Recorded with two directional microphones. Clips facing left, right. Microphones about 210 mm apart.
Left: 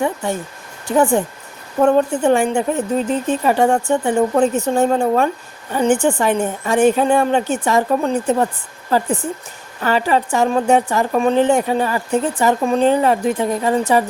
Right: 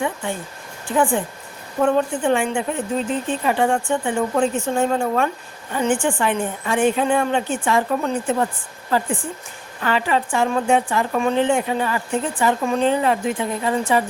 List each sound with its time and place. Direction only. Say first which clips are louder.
0.9 s a woman's voice: left 4 dB; 40° left (ahead or behind)